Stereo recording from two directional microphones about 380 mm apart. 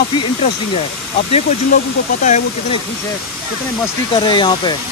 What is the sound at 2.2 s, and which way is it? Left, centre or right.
Speech, centre.